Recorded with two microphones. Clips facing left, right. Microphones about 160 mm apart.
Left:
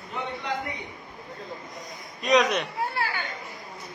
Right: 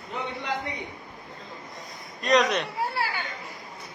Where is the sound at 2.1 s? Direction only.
Centre (ahead or behind).